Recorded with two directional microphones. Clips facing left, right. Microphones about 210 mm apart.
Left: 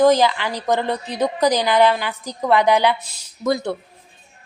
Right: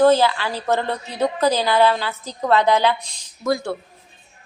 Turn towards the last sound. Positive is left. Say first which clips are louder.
# left 1 dB
turn(degrees=20)  # may be behind; listen again after turning